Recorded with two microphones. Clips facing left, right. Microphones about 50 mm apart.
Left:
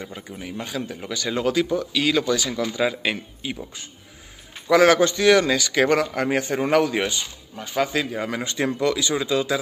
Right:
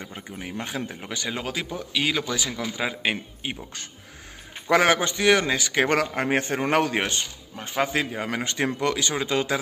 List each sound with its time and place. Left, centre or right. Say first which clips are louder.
0.4 s speech: left 1 dB; right
1.4 s a man's voice: left 9 dB; centre
3.4 s speech: left 2 dB; right
4.8 s a man's voice: left 4 dB; right